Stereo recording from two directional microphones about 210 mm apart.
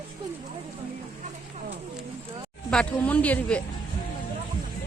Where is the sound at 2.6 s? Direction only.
5° left (ahead or behind).